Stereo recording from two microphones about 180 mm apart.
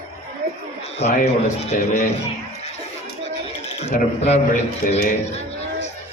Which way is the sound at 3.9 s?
50° left (ahead or behind).